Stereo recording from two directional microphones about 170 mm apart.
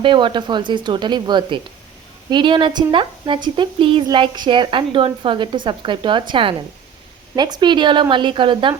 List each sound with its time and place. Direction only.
0.0 s a woman's voice: 30° right (ahead or behind)